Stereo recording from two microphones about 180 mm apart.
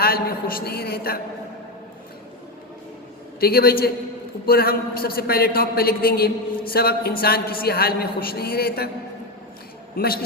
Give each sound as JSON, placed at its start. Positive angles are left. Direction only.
{"t": 0.0, "sound": "a man's voice", "side_deg": 55}
{"t": 3.4, "sound": "a man's voice", "side_deg": 60}
{"t": 9.9, "sound": "a man's voice", "side_deg": 55}